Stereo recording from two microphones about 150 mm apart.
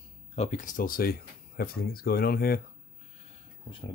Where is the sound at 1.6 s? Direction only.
90° left.